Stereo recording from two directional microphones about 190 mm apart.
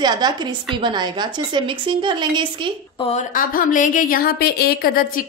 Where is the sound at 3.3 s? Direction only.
45° left (ahead or behind).